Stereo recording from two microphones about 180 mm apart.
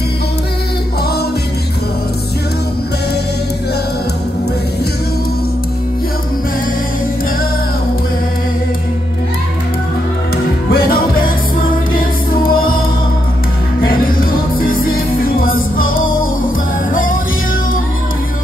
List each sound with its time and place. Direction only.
10.3 s music: 55° left (ahead or behind)
13.8 s music: 50° left (ahead or behind)